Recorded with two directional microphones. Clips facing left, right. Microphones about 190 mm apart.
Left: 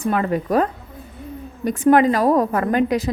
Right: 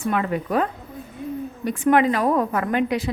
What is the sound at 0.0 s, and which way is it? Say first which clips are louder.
A woman's voice: left 3 dB; 40° left (ahead or behind).